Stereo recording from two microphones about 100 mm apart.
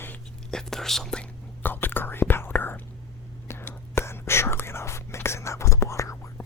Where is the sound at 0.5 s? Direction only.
5° left (ahead or behind).